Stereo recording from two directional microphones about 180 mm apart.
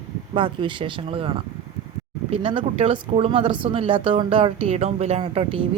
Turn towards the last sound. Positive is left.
turn(degrees=-30)  # may be behind; listen again after turning